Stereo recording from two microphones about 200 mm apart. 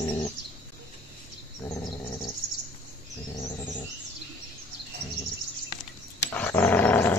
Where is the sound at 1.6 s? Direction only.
20° left (ahead or behind).